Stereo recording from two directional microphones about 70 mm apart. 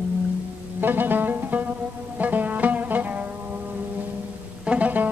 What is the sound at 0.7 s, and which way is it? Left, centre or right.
Music, right.